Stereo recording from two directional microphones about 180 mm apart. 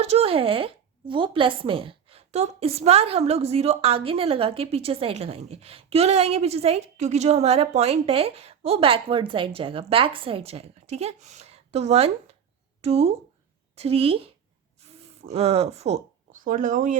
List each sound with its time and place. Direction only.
0.0 s speech: 35° right (ahead or behind)